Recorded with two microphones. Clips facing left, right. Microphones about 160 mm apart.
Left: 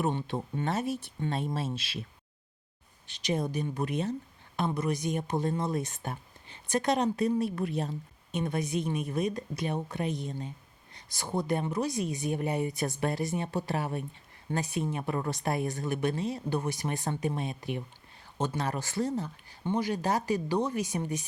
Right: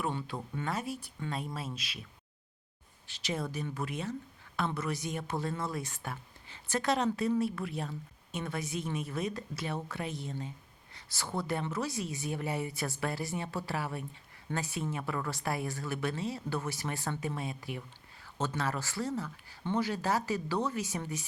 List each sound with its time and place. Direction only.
0.0 s speech: 25° left (ahead or behind)
3.1 s speech: 20° left (ahead or behind)